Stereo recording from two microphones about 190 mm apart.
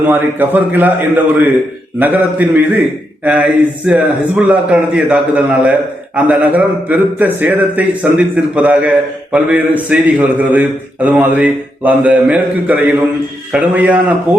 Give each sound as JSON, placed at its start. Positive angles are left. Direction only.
{"t": 0.1, "sound": "a man's voice", "side_deg": -10}